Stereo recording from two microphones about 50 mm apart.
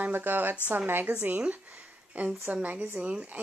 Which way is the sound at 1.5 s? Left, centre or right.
Right.